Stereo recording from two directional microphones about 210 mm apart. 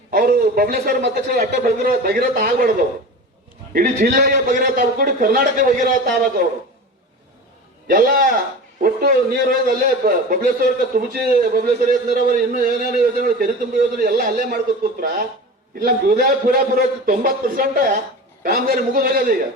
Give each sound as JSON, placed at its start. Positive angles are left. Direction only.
{"t": 0.1, "sound": "a man's voice", "side_deg": -45}
{"t": 7.9, "sound": "a man's voice", "side_deg": -45}
{"t": 15.8, "sound": "a man's voice", "side_deg": -45}